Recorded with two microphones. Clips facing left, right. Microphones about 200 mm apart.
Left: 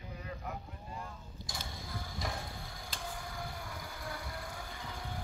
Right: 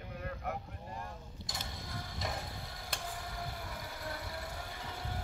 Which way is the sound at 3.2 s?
Centre (ahead or behind).